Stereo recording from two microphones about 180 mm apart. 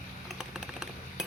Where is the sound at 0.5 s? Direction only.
5° right (ahead or behind).